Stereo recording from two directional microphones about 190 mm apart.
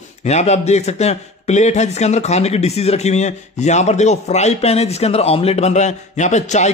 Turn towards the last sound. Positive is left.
turn(degrees=40)  # may be behind; listen again after turning